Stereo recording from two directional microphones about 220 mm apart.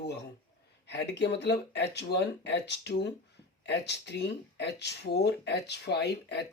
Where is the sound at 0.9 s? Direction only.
50° left (ahead or behind).